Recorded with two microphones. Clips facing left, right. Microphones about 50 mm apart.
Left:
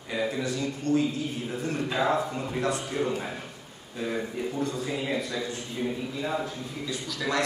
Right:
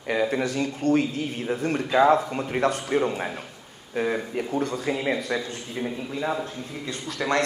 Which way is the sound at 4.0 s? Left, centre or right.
Right.